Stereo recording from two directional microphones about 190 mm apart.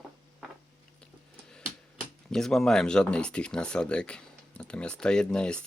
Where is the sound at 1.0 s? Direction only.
5° left (ahead or behind).